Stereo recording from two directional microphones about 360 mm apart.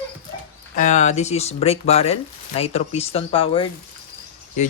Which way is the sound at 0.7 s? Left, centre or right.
Centre.